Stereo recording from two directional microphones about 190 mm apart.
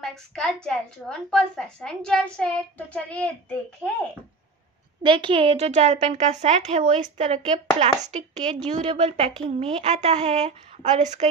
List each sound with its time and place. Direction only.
0.0 s a woman's voice: 5° left (ahead or behind)
5.0 s speech: 25° right (ahead or behind)